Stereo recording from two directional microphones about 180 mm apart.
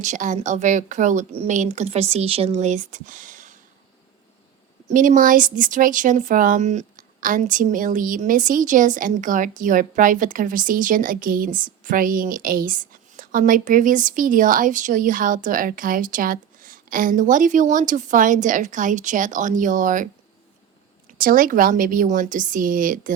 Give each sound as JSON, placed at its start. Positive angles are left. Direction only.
{"t": 0.0, "sound": "speech", "side_deg": -40}
{"t": 4.9, "sound": "speech", "side_deg": -45}
{"t": 21.2, "sound": "speech", "side_deg": -50}